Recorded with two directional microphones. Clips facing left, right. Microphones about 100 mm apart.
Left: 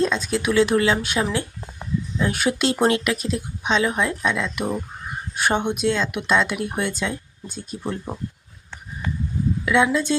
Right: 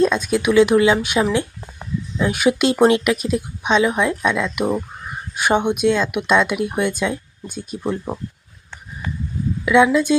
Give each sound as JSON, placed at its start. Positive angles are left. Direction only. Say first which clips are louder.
{"t": 0.0, "sound": "speech", "louder": "right 5 dB", "side_deg": -15}
{"t": 9.6, "sound": "speech", "louder": "right 6 dB", "side_deg": -15}